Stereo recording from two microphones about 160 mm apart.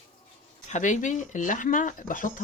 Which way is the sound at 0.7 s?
50° left (ahead or behind).